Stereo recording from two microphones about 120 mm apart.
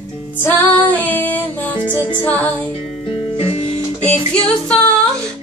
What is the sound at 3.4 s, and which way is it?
Music, 55° left (ahead or behind).